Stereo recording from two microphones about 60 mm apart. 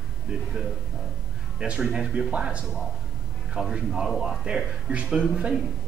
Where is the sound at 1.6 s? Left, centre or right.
Centre.